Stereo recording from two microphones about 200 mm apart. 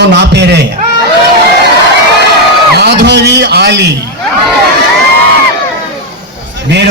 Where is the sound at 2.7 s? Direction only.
55° right (ahead or behind).